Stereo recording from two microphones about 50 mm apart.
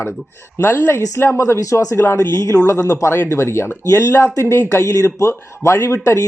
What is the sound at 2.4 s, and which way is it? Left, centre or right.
Speech, left.